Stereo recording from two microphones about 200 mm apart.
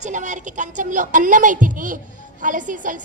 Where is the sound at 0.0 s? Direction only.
40° right (ahead or behind).